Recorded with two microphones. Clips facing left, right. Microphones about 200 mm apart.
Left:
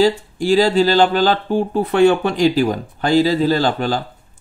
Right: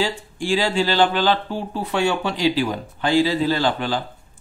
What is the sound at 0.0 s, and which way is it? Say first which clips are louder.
Speech: left 9 dB; 40° left (ahead or behind).